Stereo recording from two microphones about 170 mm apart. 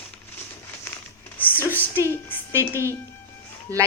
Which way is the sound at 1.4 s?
10° left (ahead or behind).